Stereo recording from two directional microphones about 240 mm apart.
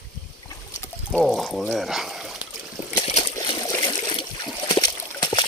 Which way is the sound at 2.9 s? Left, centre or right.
Left.